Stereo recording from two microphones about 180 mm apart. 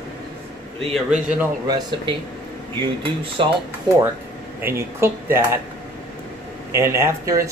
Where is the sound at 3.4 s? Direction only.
30° right (ahead or behind).